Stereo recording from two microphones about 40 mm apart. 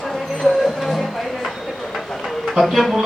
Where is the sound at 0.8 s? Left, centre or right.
Centre.